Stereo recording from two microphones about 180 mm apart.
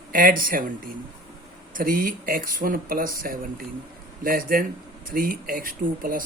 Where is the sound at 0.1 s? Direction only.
50° right (ahead or behind).